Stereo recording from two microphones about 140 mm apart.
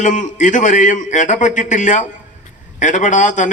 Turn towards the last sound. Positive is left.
turn(degrees=65)  # may be behind; listen again after turning